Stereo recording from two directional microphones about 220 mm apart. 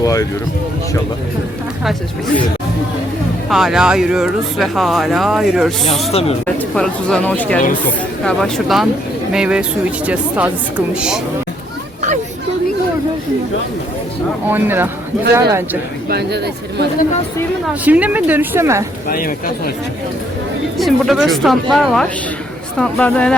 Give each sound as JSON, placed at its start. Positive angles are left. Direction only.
{"t": 0.0, "sound": "speech", "side_deg": 15}
{"t": 1.8, "sound": "speech", "side_deg": 0}
{"t": 3.5, "sound": "speech", "side_deg": 0}
{"t": 6.1, "sound": "speech", "side_deg": 25}
{"t": 6.6, "sound": "speech", "side_deg": 5}
{"t": 14.5, "sound": "speech", "side_deg": -10}
{"t": 16.0, "sound": "speech", "side_deg": -45}
{"t": 17.8, "sound": "speech", "side_deg": -5}
{"t": 19.0, "sound": "speech", "side_deg": 40}
{"t": 20.7, "sound": "speech", "side_deg": 0}